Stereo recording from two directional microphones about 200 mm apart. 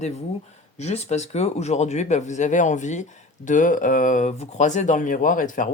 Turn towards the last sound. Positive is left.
turn(degrees=40)  # may be behind; listen again after turning